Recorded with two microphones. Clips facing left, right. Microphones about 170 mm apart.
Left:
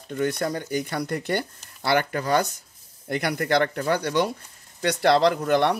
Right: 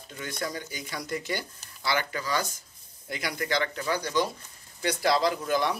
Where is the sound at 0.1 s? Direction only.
55° left (ahead or behind).